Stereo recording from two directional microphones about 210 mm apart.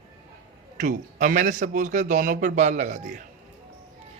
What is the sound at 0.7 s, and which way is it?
Speech, 40° right (ahead or behind).